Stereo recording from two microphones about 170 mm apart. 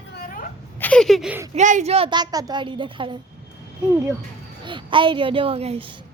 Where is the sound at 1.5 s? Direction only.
45° right (ahead or behind); by 3.2 s 30° right (ahead or behind).